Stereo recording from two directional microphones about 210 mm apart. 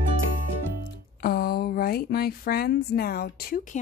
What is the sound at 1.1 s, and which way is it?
Speech, 45° left (ahead or behind).